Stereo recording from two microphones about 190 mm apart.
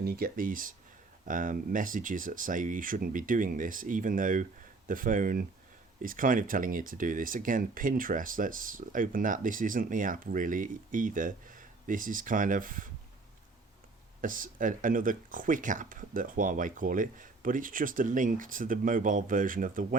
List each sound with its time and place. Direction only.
0.0 s speech: 50° right (ahead or behind)
14.2 s speech: 45° right (ahead or behind)